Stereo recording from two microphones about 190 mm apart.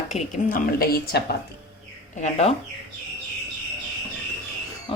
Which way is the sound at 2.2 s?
35° left (ahead or behind).